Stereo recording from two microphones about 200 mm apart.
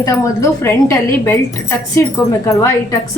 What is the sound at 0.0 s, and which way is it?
A woman's voice, 15° left (ahead or behind).